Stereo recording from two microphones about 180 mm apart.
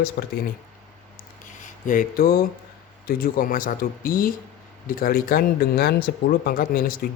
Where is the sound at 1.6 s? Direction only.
45° left (ahead or behind).